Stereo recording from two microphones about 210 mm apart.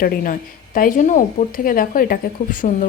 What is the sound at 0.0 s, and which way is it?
A woman's voice, 40° left (ahead or behind).